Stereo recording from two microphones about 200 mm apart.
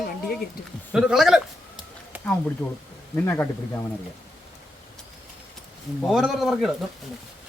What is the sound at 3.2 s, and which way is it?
Speech, 15° left (ahead or behind).